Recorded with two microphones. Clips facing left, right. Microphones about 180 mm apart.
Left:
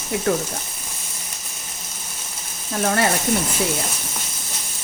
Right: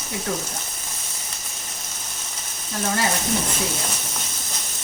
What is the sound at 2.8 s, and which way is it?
Speech, 60° left (ahead or behind).